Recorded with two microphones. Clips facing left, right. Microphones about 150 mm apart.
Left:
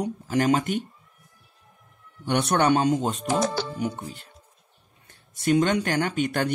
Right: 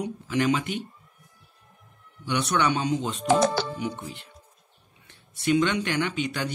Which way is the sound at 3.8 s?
45° left (ahead or behind).